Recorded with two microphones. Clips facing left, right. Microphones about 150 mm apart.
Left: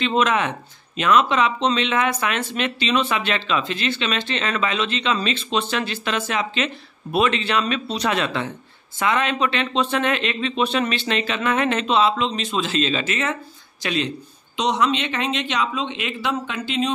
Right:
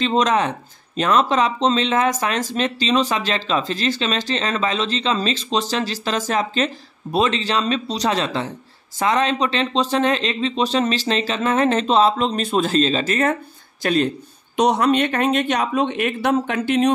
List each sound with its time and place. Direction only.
0.0 s speech: 35° right (ahead or behind); by 16.9 s 60° right (ahead or behind)